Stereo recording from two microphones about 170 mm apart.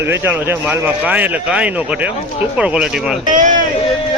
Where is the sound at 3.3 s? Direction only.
50° right (ahead or behind).